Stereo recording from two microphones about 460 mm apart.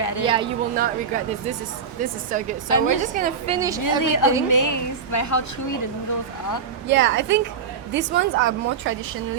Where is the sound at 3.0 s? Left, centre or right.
Centre.